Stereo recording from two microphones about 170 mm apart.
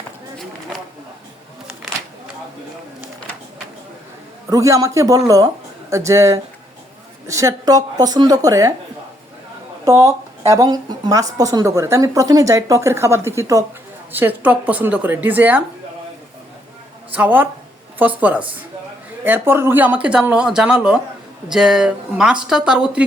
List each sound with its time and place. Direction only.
4.4 s speech: 20° right (ahead or behind)
9.8 s speech: 20° right (ahead or behind)
17.1 s speech: 10° right (ahead or behind)